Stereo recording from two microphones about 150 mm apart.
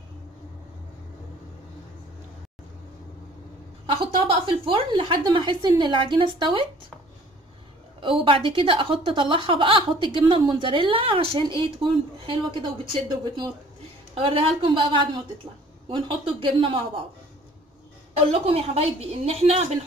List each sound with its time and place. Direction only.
3.8 s a woman's voice: 35° right (ahead or behind)
8.0 s a woman's voice: 35° right (ahead or behind)
18.1 s a woman's voice: 40° right (ahead or behind)